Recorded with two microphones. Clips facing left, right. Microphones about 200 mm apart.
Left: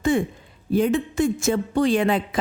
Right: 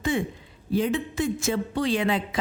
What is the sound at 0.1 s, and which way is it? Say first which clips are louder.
A woman's voice: left 5 dB; 50° left (ahead or behind).